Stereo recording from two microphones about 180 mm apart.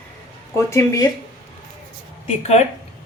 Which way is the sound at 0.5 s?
15° left (ahead or behind).